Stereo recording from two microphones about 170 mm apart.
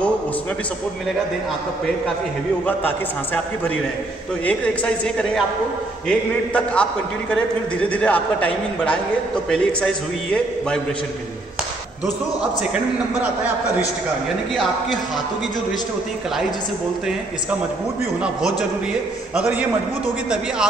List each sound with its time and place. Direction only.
4.5 s a man's voice: 5° left (ahead or behind)
7.9 s a man's voice: 10° left (ahead or behind)
19.3 s a man's voice: 10° right (ahead or behind)